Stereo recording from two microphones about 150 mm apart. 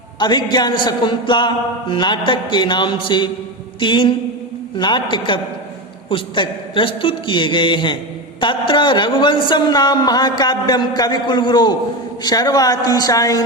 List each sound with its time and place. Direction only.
0.2 s a man's voice: 30° left (ahead or behind)
0.5 s a sound: 30° left (ahead or behind)
8.4 s a man's voice: 35° left (ahead or behind)